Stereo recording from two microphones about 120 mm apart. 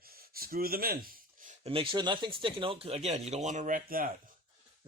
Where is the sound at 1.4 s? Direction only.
90° right.